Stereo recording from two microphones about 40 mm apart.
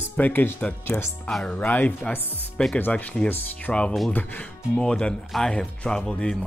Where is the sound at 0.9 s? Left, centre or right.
Centre.